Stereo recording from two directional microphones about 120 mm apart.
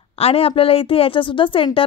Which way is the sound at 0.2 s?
55° left (ahead or behind).